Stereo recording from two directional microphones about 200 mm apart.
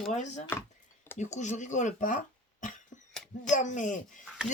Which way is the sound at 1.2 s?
35° left (ahead or behind).